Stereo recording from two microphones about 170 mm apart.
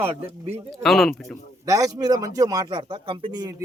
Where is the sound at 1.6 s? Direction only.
20° right (ahead or behind).